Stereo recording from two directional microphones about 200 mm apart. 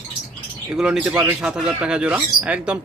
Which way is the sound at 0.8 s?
5° right (ahead or behind).